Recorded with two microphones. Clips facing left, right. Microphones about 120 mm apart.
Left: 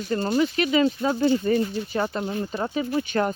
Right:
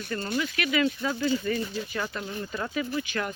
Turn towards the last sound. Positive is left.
turn(degrees=35)  # may be behind; listen again after turning